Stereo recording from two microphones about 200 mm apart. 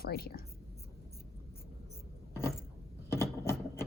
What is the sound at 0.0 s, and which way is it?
Speech, 50° left (ahead or behind).